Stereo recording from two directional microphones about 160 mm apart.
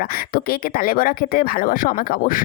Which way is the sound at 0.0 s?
65° left (ahead or behind).